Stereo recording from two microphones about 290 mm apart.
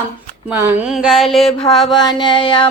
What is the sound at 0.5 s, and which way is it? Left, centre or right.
Child singing, centre.